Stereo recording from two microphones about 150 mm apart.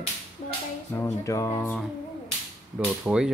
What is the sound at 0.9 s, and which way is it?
Speech, 20° left (ahead or behind).